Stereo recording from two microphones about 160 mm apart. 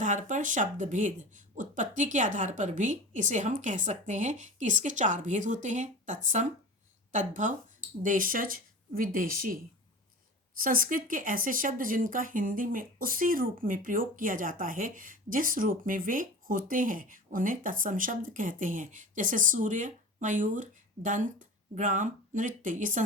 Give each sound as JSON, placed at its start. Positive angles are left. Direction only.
{"t": 0.0, "sound": "a woman's voice", "side_deg": -50}